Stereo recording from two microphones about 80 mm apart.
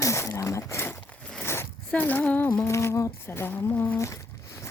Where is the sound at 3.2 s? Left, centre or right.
Left.